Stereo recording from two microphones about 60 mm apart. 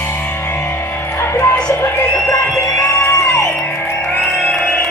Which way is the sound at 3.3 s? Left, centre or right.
Left.